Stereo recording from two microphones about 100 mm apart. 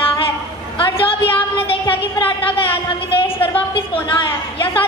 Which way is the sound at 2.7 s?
65° left (ahead or behind).